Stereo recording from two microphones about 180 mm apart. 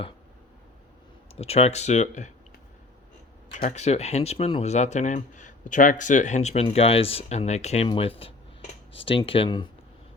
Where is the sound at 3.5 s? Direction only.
40° left (ahead or behind).